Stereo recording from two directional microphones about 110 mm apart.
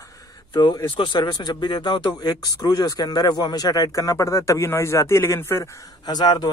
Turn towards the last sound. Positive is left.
turn(degrees=40)  # may be behind; listen again after turning